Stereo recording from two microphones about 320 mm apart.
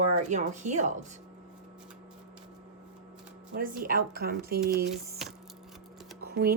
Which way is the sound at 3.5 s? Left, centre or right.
Right.